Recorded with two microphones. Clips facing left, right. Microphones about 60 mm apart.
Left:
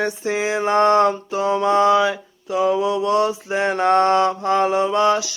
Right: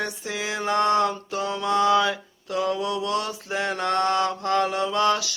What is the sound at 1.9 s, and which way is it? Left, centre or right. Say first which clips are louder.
Mantra: left 4 dB; centre.